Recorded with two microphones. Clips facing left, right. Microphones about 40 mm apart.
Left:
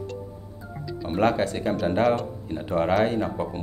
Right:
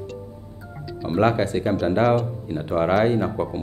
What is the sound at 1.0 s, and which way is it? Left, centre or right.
Speech, right.